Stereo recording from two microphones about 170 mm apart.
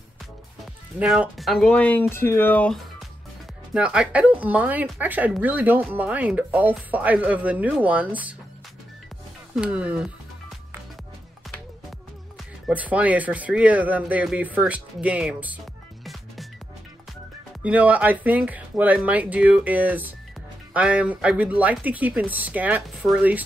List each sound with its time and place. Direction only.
0.9 s speech: 5° right (ahead or behind)
3.7 s speech: 5° right (ahead or behind)
9.6 s speech: 5° right (ahead or behind)
12.6 s speech: 10° right (ahead or behind)
17.6 s speech: 10° right (ahead or behind)